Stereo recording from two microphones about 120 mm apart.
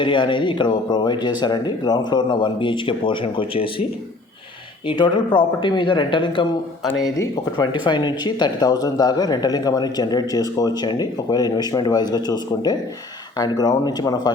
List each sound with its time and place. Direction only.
0.0 s speech: 45° left (ahead or behind)
4.9 s speech: 40° left (ahead or behind)
7.0 s speech: 25° left (ahead or behind)
7.6 s speech: 40° left (ahead or behind)